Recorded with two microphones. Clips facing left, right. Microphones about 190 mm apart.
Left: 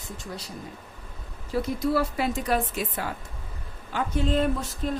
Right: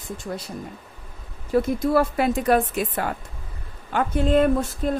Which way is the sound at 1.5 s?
50° right (ahead or behind).